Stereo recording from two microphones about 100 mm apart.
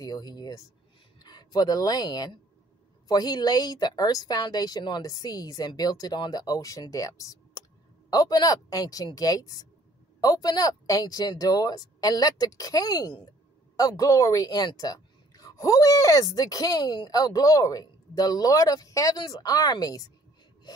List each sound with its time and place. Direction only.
0.0 s a woman's voice: 40° left (ahead or behind)